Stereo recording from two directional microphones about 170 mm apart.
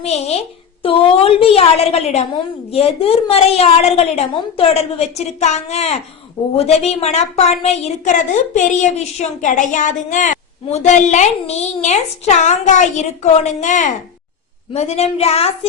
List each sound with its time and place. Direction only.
0.0 s a woman's voice: 40° left (ahead or behind)